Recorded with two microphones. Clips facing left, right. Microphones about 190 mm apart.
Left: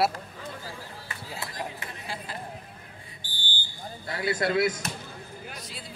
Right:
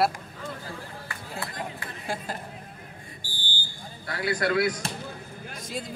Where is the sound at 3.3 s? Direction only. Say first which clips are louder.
Right 1 dB; 10° right (ahead or behind).